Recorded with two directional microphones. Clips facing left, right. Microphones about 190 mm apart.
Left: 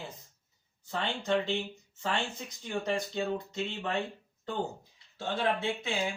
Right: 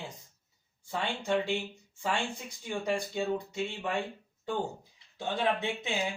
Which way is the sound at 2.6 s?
10° right (ahead or behind).